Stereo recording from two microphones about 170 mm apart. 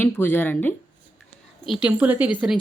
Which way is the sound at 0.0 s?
10° left (ahead or behind).